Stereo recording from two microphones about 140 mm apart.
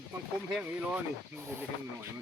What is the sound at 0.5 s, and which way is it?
Snake, 10° right (ahead or behind).